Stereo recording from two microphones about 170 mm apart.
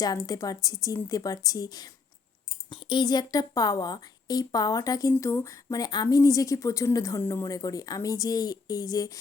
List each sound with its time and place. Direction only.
0.0 s speech: 20° left (ahead or behind)